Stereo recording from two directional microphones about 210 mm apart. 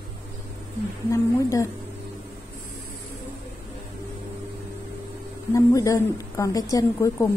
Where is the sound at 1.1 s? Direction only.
15° left (ahead or behind).